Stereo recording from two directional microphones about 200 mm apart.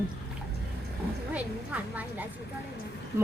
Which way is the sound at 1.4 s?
5° right (ahead or behind).